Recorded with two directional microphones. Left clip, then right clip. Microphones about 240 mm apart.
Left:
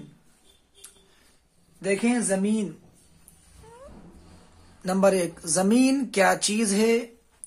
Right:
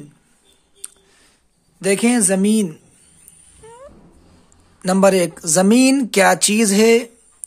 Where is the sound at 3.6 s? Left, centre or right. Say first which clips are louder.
Right 8 dB; right.